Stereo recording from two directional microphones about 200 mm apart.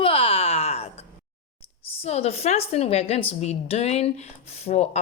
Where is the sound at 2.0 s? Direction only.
30° left (ahead or behind).